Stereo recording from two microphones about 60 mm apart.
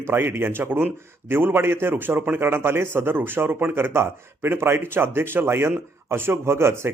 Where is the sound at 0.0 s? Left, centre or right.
Right.